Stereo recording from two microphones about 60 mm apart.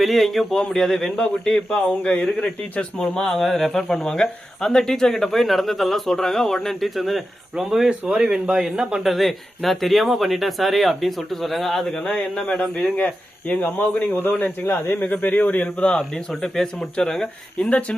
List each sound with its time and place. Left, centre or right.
0.0 s speech: centre
3.0 s speech: centre
9.0 s speech: centre
13.5 s speech: left; by 17.7 s centre
17.7 s speech: left